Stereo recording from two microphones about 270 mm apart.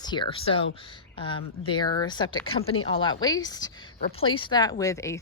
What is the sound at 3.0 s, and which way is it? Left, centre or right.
Speech, centre.